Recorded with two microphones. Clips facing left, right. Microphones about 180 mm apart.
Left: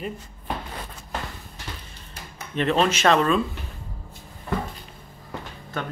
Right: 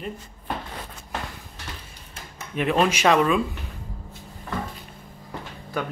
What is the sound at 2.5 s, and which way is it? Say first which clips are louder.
Speech: even; 10° right (ahead or behind).